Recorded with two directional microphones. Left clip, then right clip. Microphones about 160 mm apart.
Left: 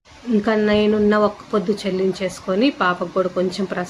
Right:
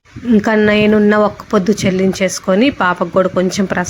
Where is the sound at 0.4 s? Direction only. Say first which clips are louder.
Right 5 dB; 55° right (ahead or behind).